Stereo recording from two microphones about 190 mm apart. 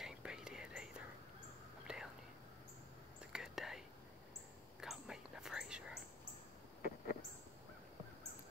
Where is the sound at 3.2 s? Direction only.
5° right (ahead or behind).